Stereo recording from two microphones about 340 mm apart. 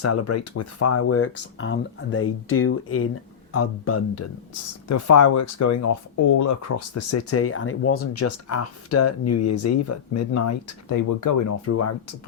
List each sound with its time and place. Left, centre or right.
0.0 s speech: left
11.6 s speech: left